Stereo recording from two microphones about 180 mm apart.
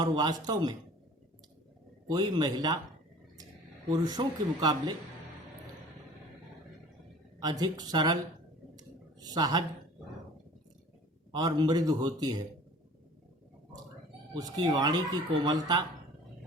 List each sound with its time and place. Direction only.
0.0 s speech: 25° right (ahead or behind)
2.0 s speech: 25° right (ahead or behind)
3.8 s speech: 20° right (ahead or behind)
7.4 s speech: 20° right (ahead or behind)
9.2 s speech: 20° right (ahead or behind)
11.3 s speech: 25° right (ahead or behind)
14.3 s speech: 20° right (ahead or behind)